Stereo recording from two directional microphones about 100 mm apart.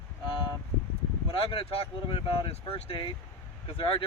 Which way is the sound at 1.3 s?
70° left (ahead or behind).